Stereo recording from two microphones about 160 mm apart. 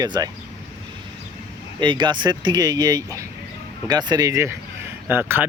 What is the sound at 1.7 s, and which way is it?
Speech, 30° right (ahead or behind).